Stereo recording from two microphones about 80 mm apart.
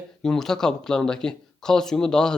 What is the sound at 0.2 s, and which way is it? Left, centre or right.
Speech, centre.